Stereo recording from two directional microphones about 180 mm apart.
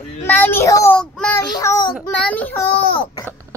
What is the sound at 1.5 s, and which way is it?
Speech, 20° left (ahead or behind).